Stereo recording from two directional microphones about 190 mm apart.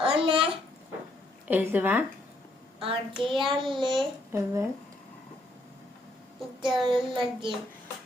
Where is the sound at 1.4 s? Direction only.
10° right (ahead or behind).